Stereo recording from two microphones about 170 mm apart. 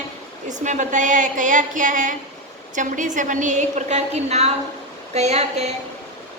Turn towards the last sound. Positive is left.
turn(degrees=-40)  # may be behind; listen again after turning